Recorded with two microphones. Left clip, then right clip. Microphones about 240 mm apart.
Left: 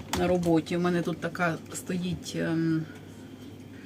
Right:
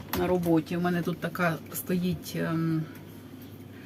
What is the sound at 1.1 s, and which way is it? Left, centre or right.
Speech, centre.